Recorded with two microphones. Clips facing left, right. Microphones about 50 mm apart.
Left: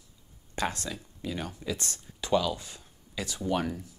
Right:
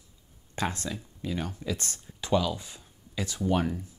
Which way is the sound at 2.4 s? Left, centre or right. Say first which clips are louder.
Even; centre.